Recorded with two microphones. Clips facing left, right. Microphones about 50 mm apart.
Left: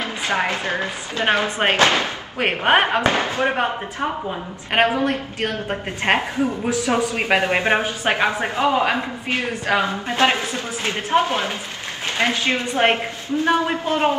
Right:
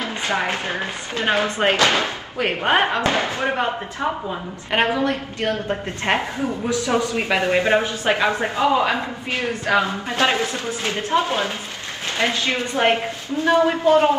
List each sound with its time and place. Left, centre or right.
1.6 s speech: left
4.7 s a man's voice: left